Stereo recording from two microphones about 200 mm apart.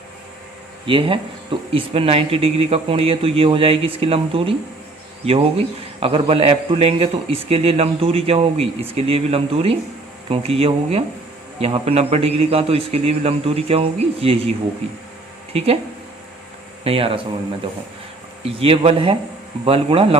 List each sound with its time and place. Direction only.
0.9 s speech: 25° right (ahead or behind)
15.5 s speech: 30° right (ahead or behind)
16.8 s speech: 30° right (ahead or behind)
18.4 s speech: 30° right (ahead or behind)